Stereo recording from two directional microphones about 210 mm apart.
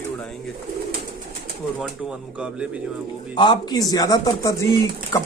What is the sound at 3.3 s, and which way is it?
Speech, 20° left (ahead or behind).